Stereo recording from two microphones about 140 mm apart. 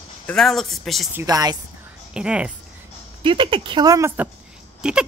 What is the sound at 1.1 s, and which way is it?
Speech, 20° right (ahead or behind).